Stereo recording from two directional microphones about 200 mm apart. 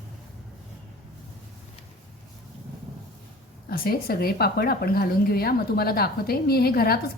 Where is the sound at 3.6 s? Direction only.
50° left (ahead or behind).